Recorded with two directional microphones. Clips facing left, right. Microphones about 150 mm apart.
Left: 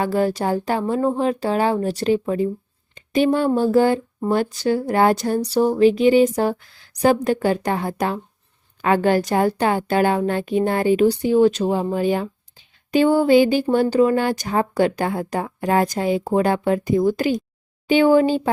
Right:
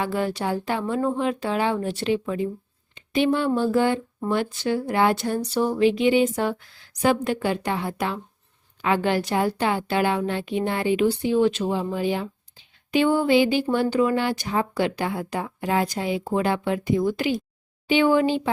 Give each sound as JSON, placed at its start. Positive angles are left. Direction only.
{"t": 0.0, "sound": "speech", "side_deg": 40}